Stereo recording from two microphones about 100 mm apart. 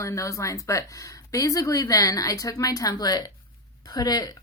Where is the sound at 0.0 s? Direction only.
30° left (ahead or behind).